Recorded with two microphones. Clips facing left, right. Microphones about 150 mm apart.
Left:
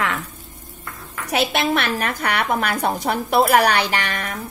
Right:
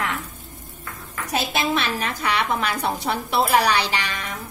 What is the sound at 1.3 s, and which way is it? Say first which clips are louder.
A woman's voice: left 3 dB; 65° left (ahead or behind).